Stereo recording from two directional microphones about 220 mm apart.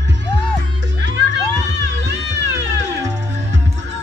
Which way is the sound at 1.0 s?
55° right (ahead or behind).